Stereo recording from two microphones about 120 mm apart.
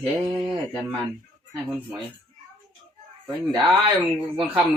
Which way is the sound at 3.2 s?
40° right (ahead or behind).